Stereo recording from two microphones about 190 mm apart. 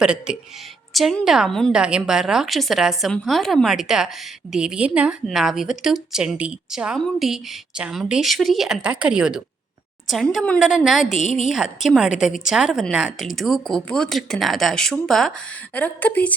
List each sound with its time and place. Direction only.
0.0 s a woman's voice: 5° right (ahead or behind)
11.1 s a woman's voice: 40° left (ahead or behind)
11.3 s a woman's voice: centre (ahead or behind)